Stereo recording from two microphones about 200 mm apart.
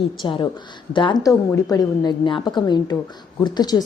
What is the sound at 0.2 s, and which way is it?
A woman's voice, 25° left (ahead or behind).